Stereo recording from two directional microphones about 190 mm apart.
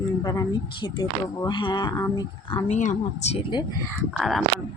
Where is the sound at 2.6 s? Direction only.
40° left (ahead or behind).